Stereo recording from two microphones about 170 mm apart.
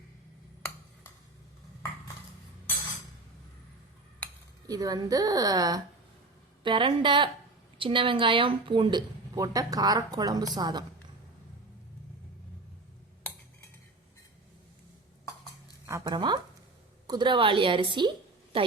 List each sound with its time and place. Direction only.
4.6 s speech: 20° right (ahead or behind)
15.9 s speech: 20° right (ahead or behind)